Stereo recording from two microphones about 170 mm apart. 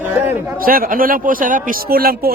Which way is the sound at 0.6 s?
60° right (ahead or behind).